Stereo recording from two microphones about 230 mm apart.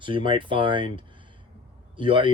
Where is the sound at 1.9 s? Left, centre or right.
Right.